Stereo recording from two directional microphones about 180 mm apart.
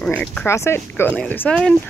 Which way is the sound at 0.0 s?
5° left (ahead or behind).